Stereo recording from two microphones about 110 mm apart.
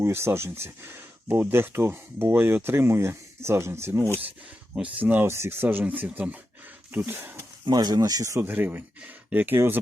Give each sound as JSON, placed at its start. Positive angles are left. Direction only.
{"t": 0.0, "sound": "speech", "side_deg": -20}
{"t": 7.7, "sound": "speech", "side_deg": -40}